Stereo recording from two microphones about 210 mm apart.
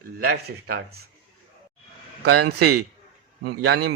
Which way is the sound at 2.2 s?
50° right (ahead or behind).